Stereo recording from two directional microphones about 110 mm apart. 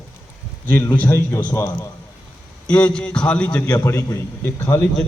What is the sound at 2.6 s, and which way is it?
Speech, 10° left (ahead or behind).